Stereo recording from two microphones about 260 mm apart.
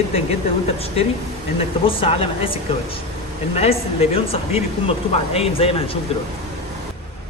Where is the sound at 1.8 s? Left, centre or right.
Left.